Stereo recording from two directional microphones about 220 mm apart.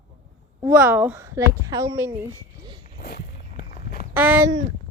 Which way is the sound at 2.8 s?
45° left (ahead or behind).